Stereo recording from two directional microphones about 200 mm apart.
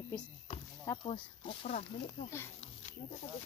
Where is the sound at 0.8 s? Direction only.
25° left (ahead or behind).